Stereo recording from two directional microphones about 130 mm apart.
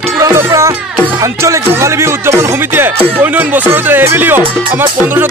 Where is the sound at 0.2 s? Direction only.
25° right (ahead or behind).